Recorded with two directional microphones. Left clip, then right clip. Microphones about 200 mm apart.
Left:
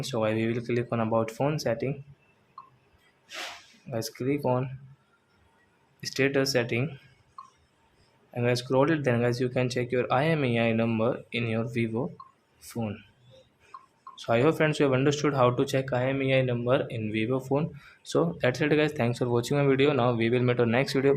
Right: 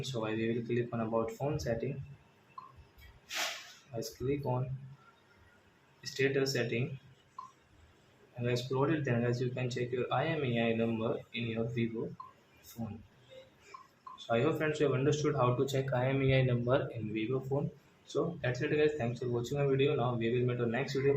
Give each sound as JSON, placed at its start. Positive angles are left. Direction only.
{"t": 0.0, "sound": "speech", "side_deg": 45}
{"t": 4.0, "sound": "speech", "side_deg": 45}
{"t": 6.0, "sound": "speech", "side_deg": 45}
{"t": 8.4, "sound": "speech", "side_deg": 45}
{"t": 14.3, "sound": "speech", "side_deg": 45}